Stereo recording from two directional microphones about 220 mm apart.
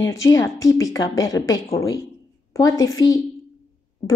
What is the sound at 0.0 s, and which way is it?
A woman's voice, 15° left (ahead or behind).